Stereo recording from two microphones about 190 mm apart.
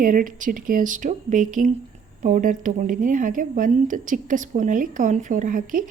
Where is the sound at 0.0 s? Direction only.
45° right (ahead or behind).